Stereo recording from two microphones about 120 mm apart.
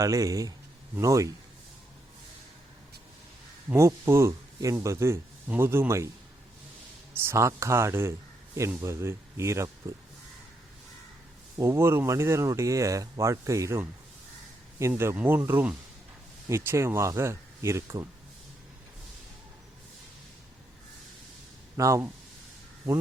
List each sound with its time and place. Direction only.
0.0 s speech: 25° right (ahead or behind)
3.7 s speech: 20° right (ahead or behind)
7.1 s speech: 20° right (ahead or behind)
11.5 s speech: 25° right (ahead or behind)
21.8 s speech: 25° right (ahead or behind)